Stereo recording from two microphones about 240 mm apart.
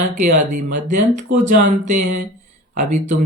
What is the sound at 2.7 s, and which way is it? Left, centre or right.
Speech, right.